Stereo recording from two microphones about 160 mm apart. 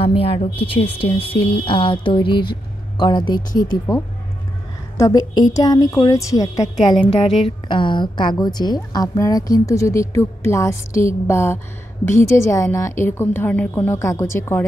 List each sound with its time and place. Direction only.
0.0 s a woman's voice: 35° left (ahead or behind)
4.9 s a woman's voice: 20° left (ahead or behind)